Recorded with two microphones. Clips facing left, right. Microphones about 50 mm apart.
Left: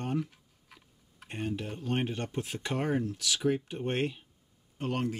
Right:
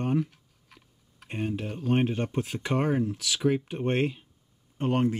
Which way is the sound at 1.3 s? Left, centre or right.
Centre.